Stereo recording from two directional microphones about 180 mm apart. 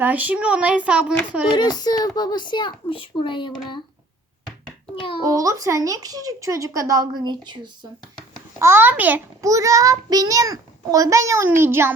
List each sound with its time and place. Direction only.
0.0 s a child's voice: 10° right (ahead or behind)
1.5 s a child's voice: 25° left (ahead or behind)
4.9 s a child's voice: 30° left (ahead or behind)
5.2 s a woman's voice: 20° right (ahead or behind)
8.5 s a child's voice: 15° right (ahead or behind)